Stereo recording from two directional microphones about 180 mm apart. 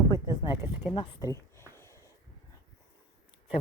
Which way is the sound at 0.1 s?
20° left (ahead or behind).